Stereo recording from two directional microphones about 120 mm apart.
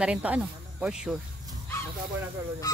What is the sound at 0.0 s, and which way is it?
Speech, 10° right (ahead or behind).